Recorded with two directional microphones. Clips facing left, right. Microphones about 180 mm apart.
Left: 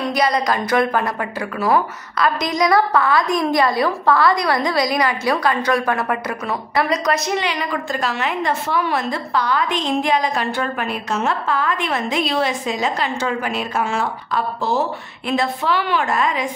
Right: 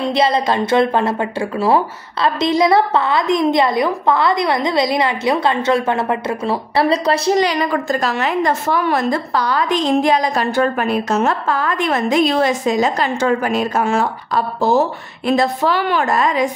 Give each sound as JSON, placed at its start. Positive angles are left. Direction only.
{"t": 0.0, "sound": "a woman's voice", "side_deg": -25}